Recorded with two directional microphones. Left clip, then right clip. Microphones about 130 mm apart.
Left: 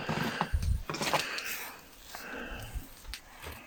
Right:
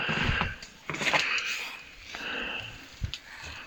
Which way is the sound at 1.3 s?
30° left (ahead or behind).